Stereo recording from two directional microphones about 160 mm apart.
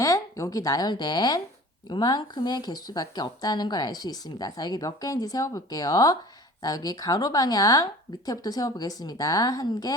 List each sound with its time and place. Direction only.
0.0 s speech: 20° left (ahead or behind)